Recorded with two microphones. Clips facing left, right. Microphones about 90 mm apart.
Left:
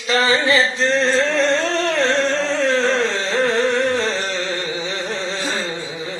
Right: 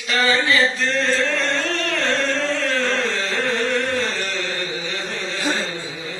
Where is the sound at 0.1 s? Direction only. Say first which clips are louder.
Left 2 dB; 25° left (ahead or behind).